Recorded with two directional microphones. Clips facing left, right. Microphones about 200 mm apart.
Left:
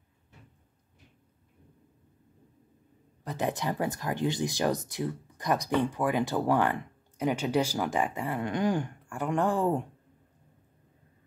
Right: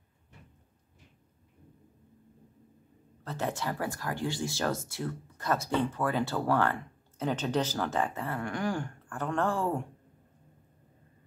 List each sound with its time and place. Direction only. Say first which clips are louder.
3.3 s speech: left 3 dB; 15° left (ahead or behind)